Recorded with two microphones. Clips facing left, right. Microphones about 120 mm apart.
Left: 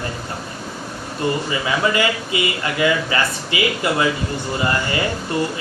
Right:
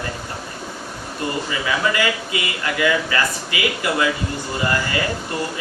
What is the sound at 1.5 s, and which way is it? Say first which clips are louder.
Speech: left 2 dB; 25° left (ahead or behind).